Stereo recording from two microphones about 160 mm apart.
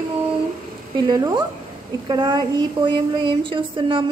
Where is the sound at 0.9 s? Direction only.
25° right (ahead or behind).